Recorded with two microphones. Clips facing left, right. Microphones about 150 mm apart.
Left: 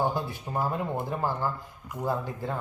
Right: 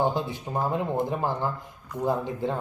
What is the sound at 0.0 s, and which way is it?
A child's voice, 20° right (ahead or behind).